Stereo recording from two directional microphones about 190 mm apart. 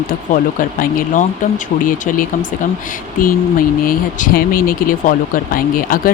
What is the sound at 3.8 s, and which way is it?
Speech, 45° left (ahead or behind).